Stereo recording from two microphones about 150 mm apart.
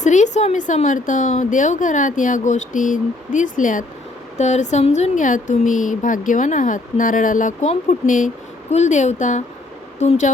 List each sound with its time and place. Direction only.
0.0 s a woman's voice: 55° left (ahead or behind)
4.4 s a woman's voice: 50° left (ahead or behind)